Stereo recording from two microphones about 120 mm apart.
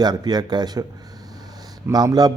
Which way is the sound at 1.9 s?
35° right (ahead or behind).